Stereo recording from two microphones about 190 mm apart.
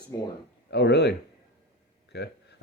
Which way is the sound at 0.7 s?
60° left (ahead or behind).